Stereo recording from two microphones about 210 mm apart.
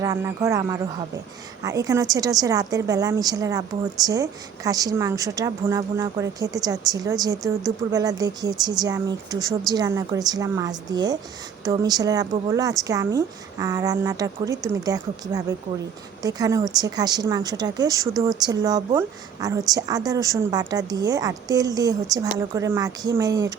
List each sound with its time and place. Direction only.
0.0 s speech: 15° right (ahead or behind)